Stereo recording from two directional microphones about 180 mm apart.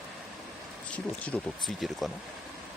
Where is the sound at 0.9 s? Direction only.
5° left (ahead or behind).